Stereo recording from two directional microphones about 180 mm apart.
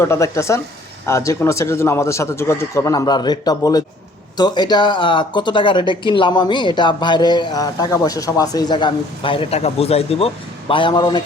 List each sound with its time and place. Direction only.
0.0 s speech: 15° left (ahead or behind)